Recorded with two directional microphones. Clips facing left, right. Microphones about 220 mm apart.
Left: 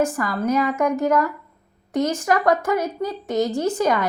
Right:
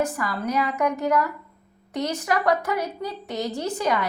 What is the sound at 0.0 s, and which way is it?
A woman's voice, 45° left (ahead or behind).